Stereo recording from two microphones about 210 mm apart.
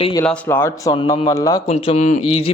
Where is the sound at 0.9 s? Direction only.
20° left (ahead or behind).